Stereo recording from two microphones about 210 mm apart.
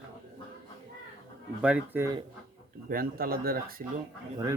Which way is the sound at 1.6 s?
5° right (ahead or behind).